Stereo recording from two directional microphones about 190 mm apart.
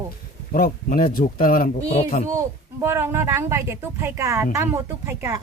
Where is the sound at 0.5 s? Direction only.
45° left (ahead or behind).